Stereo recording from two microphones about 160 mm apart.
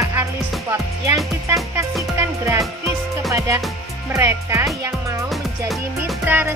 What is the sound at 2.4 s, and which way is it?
Music, 20° right (ahead or behind).